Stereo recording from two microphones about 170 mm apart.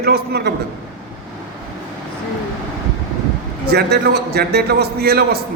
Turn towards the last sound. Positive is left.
turn(degrees=-65)  # may be behind; listen again after turning